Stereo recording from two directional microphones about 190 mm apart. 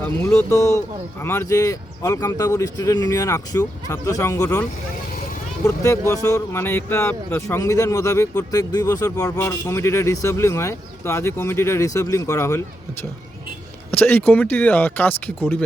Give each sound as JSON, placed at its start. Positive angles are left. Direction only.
{"t": 0.2, "sound": "speech", "side_deg": 15}
{"t": 5.6, "sound": "speech", "side_deg": 15}